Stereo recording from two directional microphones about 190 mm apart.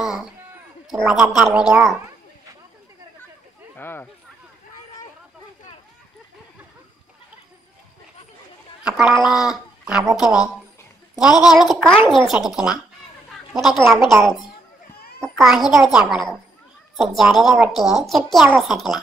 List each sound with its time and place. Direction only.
0.0 s a sound: centre (ahead or behind)
0.8 s a woman's voice: centre (ahead or behind)
3.7 s speech: 10° left (ahead or behind)
8.8 s a woman's voice: 5° right (ahead or behind)
10.1 s speech: 20° left (ahead or behind)
11.1 s a woman's voice: 5° right (ahead or behind)